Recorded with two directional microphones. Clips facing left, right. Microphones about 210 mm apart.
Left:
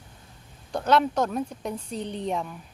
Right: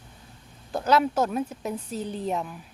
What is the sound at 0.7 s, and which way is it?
A woman's voice, 5° right (ahead or behind).